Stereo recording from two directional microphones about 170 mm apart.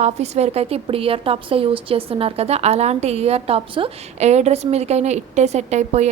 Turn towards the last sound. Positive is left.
turn(degrees=-40)  # may be behind; listen again after turning